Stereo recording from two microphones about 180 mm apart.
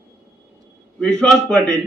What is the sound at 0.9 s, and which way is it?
Speech, 5° left (ahead or behind).